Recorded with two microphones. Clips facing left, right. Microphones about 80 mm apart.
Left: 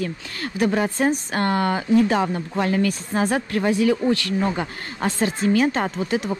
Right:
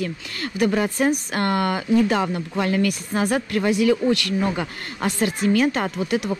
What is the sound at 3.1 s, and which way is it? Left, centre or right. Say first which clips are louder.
Speech: even; left.